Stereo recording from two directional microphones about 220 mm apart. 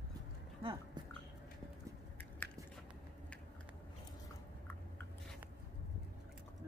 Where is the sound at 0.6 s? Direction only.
25° right (ahead or behind).